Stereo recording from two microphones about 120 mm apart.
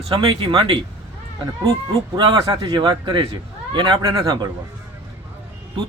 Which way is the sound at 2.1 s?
40° right (ahead or behind).